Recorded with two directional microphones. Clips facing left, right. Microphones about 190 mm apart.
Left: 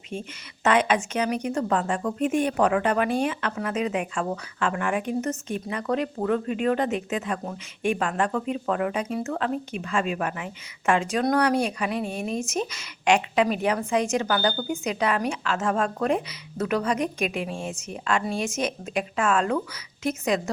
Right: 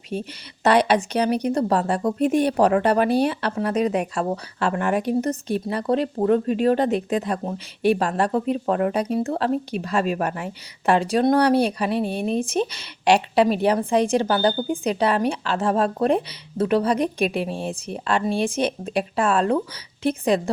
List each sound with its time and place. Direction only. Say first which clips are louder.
0.1 s a woman's voice: right 5 dB; 40° right (ahead or behind)